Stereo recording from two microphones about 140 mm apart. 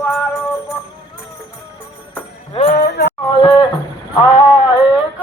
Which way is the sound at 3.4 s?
35° left (ahead or behind).